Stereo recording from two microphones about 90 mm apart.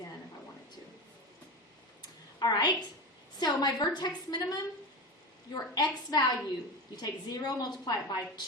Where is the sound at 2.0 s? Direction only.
50° left (ahead or behind).